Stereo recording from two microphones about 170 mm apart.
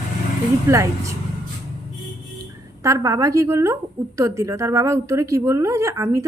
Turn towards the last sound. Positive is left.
turn(degrees=-20)  # may be behind; listen again after turning